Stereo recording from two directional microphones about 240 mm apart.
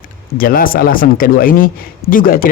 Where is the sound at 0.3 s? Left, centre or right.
Left.